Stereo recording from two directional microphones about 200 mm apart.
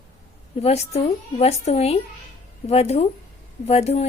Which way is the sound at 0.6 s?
30° left (ahead or behind).